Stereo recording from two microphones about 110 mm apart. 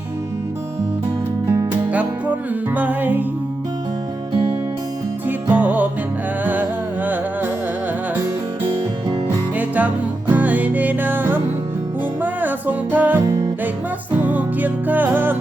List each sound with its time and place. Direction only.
1.9 s music: 15° right (ahead or behind)
4.3 s music: 50° right (ahead or behind)
5.2 s music: 15° right (ahead or behind)
9.6 s music: 15° right (ahead or behind)